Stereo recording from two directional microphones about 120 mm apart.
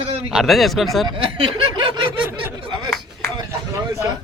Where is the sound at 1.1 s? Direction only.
50° right (ahead or behind).